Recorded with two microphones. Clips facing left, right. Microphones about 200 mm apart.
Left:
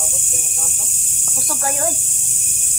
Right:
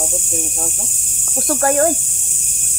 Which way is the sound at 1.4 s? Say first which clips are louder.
Right 9 dB; 55° right (ahead or behind).